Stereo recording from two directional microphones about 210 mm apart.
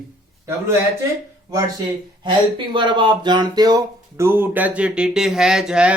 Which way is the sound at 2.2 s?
20° right (ahead or behind).